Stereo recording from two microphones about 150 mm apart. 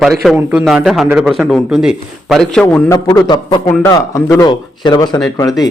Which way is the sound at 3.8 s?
20° left (ahead or behind).